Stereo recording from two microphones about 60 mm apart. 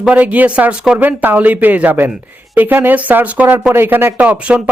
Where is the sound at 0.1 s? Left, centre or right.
Right.